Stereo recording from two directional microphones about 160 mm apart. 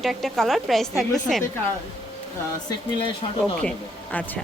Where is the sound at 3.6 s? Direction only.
10° left (ahead or behind).